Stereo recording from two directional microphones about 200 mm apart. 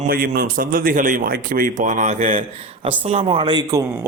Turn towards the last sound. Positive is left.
turn(degrees=-15)  # may be behind; listen again after turning